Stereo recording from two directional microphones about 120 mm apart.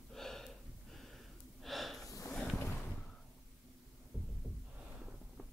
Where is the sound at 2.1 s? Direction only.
25° left (ahead or behind).